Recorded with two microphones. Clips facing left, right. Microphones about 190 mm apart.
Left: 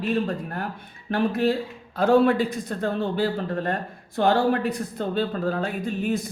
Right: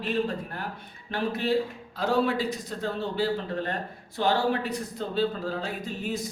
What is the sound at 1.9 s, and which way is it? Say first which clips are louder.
A man's voice: left 7 dB; 50° left (ahead or behind).